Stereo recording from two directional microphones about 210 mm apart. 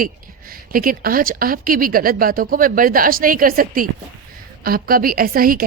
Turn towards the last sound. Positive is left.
turn(degrees=-45)  # may be behind; listen again after turning